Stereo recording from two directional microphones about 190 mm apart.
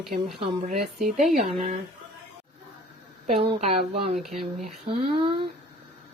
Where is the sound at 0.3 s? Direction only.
30° right (ahead or behind).